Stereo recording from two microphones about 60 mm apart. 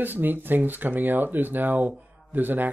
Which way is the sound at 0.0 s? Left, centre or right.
Right.